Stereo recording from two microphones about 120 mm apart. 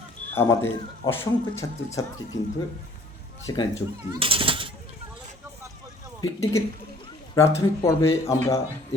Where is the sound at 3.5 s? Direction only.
30° left (ahead or behind).